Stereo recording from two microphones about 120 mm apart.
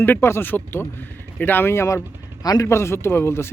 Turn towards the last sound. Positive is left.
turn(degrees=20)  # may be behind; listen again after turning